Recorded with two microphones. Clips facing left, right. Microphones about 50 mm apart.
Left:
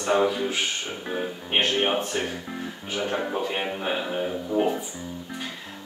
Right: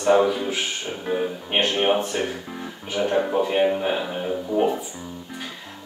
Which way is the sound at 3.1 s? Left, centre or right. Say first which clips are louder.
Right 7 dB; centre.